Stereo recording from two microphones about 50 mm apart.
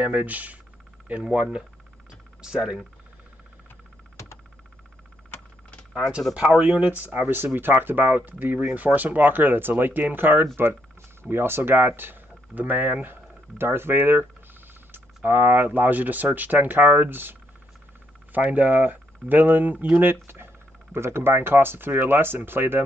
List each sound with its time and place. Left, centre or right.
0.0 s speech: right
1.2 s speech: centre
6.3 s speech: right
14.9 s speech: right
20.9 s speech: right